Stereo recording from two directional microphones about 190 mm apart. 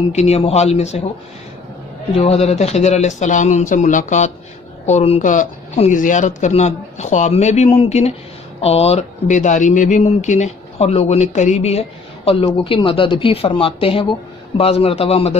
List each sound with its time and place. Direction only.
0.1 s speech: 35° left (ahead or behind)
2.1 s speech: 35° left (ahead or behind)